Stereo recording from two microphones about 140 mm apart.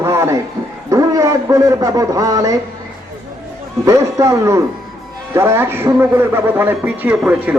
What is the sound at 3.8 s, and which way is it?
A man's voice, 20° right (ahead or behind).